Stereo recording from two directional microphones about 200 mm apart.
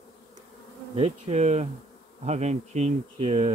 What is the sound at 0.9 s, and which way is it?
Speech, 30° right (ahead or behind).